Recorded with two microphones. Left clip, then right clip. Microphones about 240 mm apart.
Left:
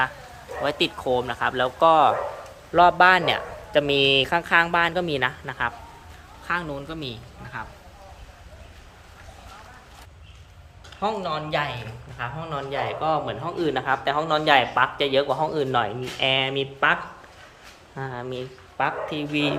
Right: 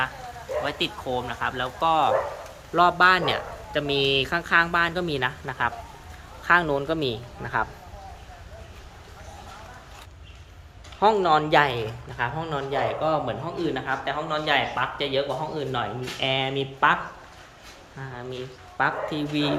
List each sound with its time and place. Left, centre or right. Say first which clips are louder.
0.6 s speech: left 7 dB; left; by 5.7 s centre
6.5 s a woman's voice: right 7 dB; centre
11.0 s speech: right 7 dB; centre
13.6 s speech: left 5 dB; centre
17.9 s speech: left 4 dB; left
18.8 s speech: even; centre